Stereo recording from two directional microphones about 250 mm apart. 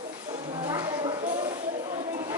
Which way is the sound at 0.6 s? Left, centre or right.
Centre.